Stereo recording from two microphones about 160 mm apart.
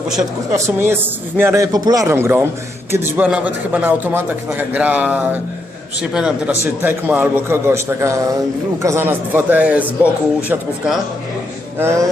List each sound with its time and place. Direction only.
0.5 s a man's voice: 15° right (ahead or behind)
11.8 s a man's voice: 15° right (ahead or behind)